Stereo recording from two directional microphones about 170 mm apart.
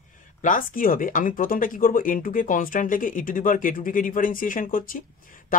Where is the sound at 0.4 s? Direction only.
50° left (ahead or behind).